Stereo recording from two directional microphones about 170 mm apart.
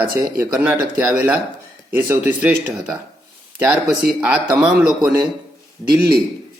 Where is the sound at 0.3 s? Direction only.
10° right (ahead or behind).